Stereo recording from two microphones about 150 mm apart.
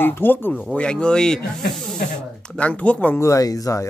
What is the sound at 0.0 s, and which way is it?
Speech, 15° left (ahead or behind).